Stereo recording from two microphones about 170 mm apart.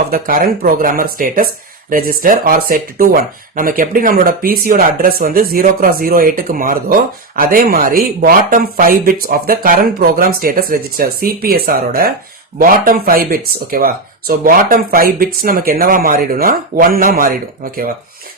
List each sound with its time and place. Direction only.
0.1 s speech: 60° right (ahead or behind)